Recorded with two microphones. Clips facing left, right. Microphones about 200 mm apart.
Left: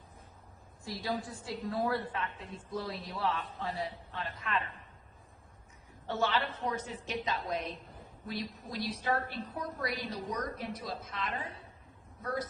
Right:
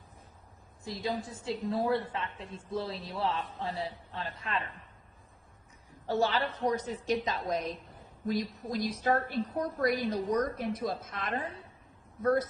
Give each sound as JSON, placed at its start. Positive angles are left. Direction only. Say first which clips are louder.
{"t": 0.9, "sound": "a man's voice", "louder": "right 2 dB", "side_deg": -20}
{"t": 6.1, "sound": "a woman's voice", "louder": "right 3 dB", "side_deg": -35}